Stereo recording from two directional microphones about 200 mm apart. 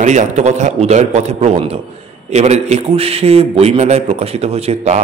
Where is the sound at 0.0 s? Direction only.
35° right (ahead or behind).